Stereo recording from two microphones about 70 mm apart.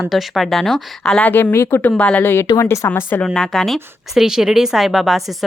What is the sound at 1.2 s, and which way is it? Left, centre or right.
Speech, left.